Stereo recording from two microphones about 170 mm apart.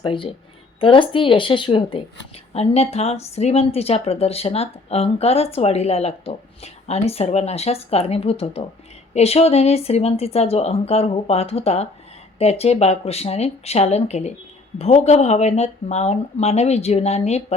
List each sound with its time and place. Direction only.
0.0 s speech: 30° left (ahead or behind)